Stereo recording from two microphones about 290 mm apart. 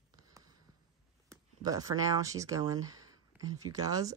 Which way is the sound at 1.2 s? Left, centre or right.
Centre.